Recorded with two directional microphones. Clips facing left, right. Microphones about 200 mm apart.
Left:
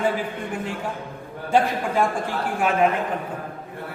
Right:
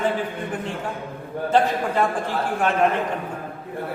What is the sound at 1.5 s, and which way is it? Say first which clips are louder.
Speech: right 1 dB; 10° left (ahead or behind).